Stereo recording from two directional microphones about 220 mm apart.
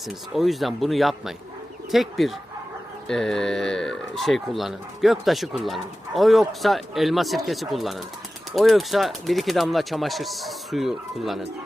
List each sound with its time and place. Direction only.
0.1 s speech: centre (ahead or behind)